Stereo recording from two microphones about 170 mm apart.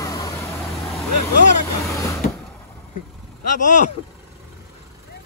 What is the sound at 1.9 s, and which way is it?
Vehicle, 15° left (ahead or behind).